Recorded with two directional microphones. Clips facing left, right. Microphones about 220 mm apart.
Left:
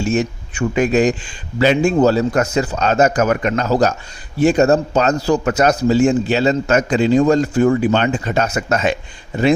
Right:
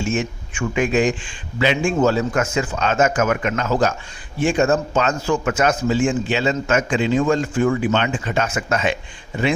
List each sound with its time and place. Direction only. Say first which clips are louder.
0.0 s a man's voice: left 4 dB; 40° left (ahead or behind)